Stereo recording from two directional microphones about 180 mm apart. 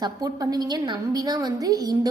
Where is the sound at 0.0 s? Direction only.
20° right (ahead or behind).